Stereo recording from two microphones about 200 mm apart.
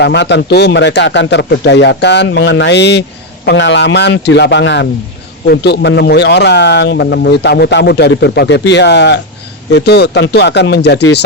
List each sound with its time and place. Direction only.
0.0 s a man's voice: 60° left (ahead or behind)